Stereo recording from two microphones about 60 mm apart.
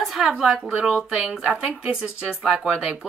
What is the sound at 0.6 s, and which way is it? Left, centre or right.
Speech, centre.